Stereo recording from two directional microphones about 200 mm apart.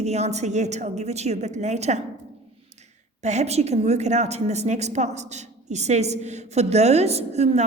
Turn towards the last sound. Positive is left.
turn(degrees=-35)  # may be behind; listen again after turning